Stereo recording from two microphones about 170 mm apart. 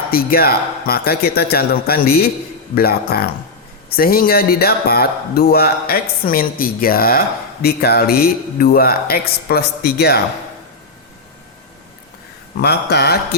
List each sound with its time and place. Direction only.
0.1 s speech: 60° left (ahead or behind)
12.6 s speech: 70° left (ahead or behind)